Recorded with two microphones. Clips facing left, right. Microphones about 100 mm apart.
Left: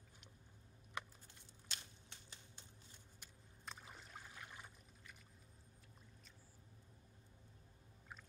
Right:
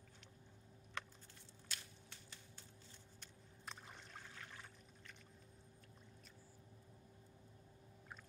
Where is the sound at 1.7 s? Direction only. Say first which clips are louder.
Even; 20° left (ahead or behind).